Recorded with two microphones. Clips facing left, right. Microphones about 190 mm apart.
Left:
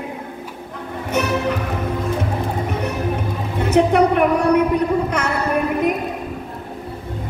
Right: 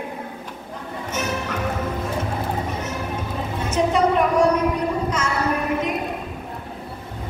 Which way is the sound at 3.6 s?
60° left (ahead or behind).